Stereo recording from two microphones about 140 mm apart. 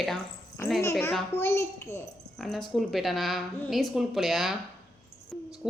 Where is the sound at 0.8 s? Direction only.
20° left (ahead or behind).